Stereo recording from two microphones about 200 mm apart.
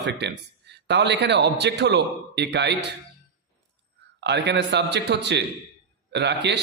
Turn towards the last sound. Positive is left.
turn(degrees=-60)  # may be behind; listen again after turning